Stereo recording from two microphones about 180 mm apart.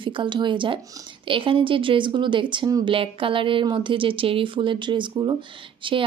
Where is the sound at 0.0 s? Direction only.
25° right (ahead or behind).